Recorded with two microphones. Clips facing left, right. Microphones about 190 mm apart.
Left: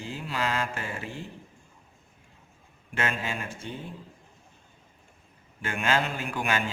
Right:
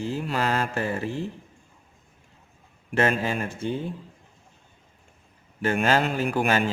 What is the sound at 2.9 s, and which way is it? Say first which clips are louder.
Speech: right 8 dB; 40° right (ahead or behind).